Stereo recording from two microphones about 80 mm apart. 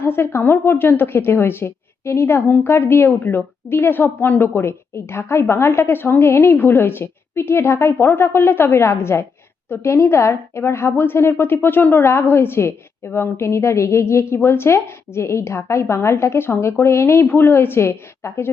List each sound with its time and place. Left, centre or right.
0.0 s a woman's voice: left